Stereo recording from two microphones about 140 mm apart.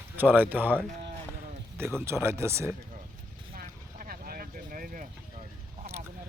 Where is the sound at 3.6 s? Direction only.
90° right.